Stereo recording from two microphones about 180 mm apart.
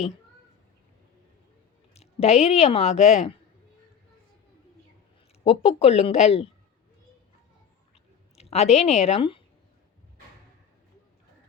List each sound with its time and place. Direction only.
1.9 s speech: 35° left (ahead or behind)
5.5 s speech: 35° left (ahead or behind)
8.4 s a woman's voice: 35° left (ahead or behind)